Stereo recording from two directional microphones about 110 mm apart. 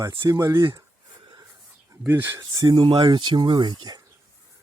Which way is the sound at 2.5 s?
40° right (ahead or behind).